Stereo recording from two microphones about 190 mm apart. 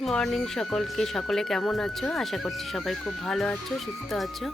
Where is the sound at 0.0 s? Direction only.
Centre (ahead or behind).